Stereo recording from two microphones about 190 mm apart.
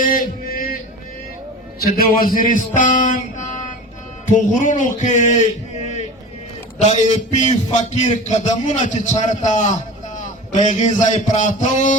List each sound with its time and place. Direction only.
0.0 s a sound: 45° left (ahead or behind)
1.8 s a man's voice: 50° left (ahead or behind)
6.7 s a man's voice: 35° left (ahead or behind)